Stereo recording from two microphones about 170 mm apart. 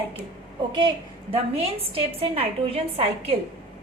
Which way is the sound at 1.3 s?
35° right (ahead or behind).